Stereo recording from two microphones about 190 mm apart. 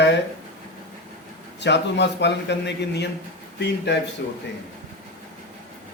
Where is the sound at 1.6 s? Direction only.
65° left (ahead or behind).